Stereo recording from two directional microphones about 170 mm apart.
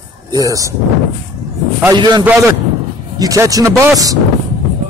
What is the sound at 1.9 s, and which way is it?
Speech, 25° right (ahead or behind).